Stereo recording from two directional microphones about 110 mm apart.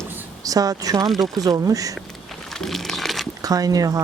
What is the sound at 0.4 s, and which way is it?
Speech, 35° right (ahead or behind).